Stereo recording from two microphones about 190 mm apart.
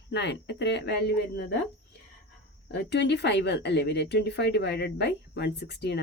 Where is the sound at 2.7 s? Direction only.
65° left (ahead or behind).